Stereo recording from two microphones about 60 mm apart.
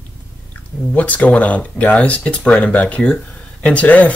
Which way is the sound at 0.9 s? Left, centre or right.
Left.